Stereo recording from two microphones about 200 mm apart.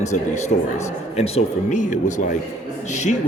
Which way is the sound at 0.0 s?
35° left (ahead or behind).